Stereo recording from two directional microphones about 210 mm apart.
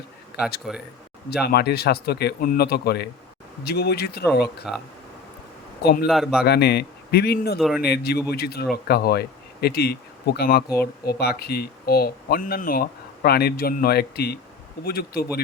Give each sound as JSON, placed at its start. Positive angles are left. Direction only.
{"t": 1.3, "sound": "speech", "side_deg": 50}
{"t": 4.7, "sound": "a man's voice", "side_deg": 0}
{"t": 5.8, "sound": "speech", "side_deg": 50}
{"t": 6.1, "sound": "a man's voice", "side_deg": 0}
{"t": 6.4, "sound": "speech", "side_deg": 50}